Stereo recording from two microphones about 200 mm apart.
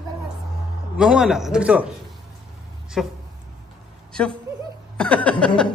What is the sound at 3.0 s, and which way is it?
Speech, centre (ahead or behind).